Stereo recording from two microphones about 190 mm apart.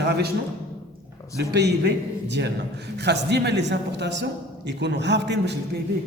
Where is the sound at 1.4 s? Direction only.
65° right (ahead or behind).